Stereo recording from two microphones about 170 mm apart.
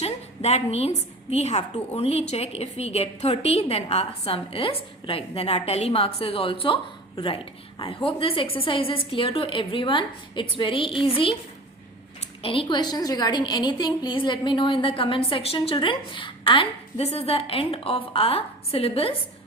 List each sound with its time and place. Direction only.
0.0 s a woman's voice: 40° left (ahead or behind)